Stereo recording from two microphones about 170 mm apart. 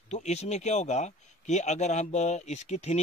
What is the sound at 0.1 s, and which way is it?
Speech, 40° left (ahead or behind).